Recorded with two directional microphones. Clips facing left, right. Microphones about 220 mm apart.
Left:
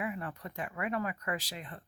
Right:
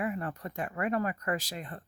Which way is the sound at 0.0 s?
45° right (ahead or behind).